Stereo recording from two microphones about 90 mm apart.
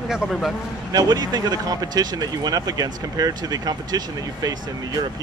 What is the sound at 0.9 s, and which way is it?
Speech, 45° right (ahead or behind).